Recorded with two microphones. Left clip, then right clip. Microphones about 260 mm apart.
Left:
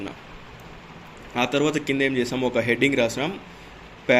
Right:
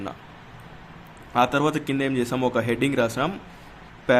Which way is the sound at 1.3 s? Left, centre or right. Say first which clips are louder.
Right 2 dB; right.